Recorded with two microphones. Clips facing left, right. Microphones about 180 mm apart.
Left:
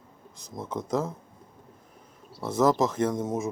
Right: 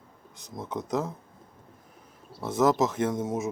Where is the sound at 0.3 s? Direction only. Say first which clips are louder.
Left 1 dB; centre (ahead or behind).